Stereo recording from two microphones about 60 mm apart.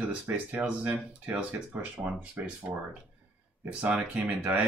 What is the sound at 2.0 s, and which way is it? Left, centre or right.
Speech, right.